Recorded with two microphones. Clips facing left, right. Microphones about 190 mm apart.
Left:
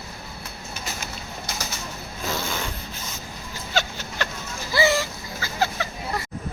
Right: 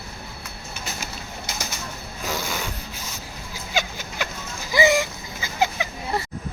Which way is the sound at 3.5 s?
10° right (ahead or behind).